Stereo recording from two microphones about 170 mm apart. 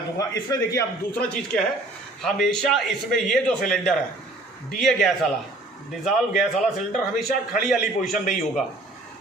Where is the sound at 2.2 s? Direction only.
5° left (ahead or behind).